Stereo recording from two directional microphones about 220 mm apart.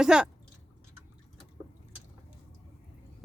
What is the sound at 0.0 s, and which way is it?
Speech, 5° right (ahead or behind).